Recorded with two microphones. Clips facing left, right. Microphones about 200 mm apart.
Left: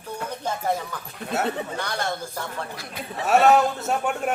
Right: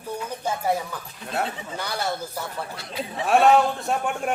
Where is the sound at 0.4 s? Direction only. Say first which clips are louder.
Right 1 dB; 10° right (ahead or behind).